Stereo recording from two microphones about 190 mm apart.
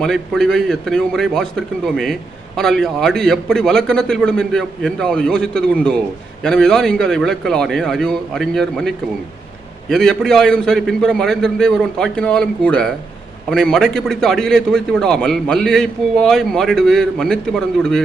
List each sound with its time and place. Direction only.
0.0 s a man's voice: 5° left (ahead or behind)